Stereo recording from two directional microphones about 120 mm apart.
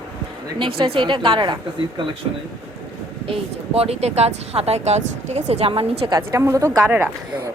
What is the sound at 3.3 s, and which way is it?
Speech, 55° right (ahead or behind).